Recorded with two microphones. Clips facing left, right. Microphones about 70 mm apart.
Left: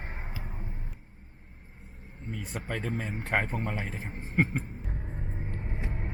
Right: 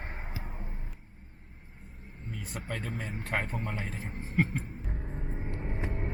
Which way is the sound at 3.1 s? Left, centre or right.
Centre.